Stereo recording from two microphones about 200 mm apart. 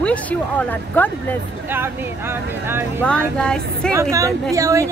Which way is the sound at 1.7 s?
10° right (ahead or behind).